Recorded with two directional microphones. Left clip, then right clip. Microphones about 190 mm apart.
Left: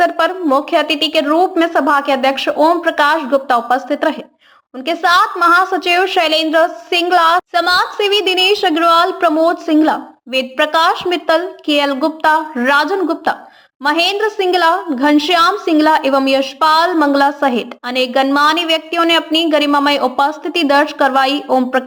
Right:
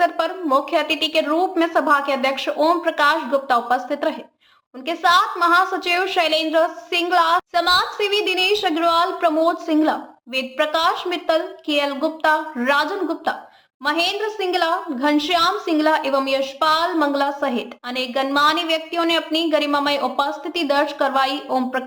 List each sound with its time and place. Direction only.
0.0 s a woman's voice: 30° left (ahead or behind)